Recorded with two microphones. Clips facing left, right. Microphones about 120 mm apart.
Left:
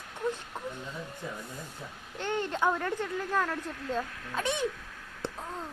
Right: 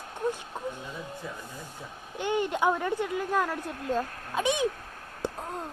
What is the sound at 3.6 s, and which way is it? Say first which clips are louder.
Speech: right 3 dB; 45° right (ahead or behind).